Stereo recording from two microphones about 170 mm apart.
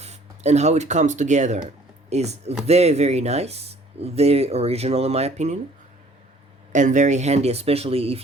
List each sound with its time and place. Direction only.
0.0 s speech: 40° right (ahead or behind)
6.7 s speech: 45° right (ahead or behind)